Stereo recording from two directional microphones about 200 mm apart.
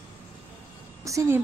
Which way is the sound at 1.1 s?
15° right (ahead or behind).